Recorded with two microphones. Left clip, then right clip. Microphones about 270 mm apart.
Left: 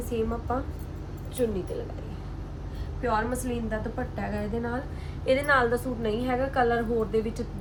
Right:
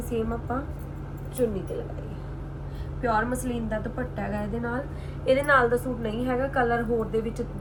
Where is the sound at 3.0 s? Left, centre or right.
Centre.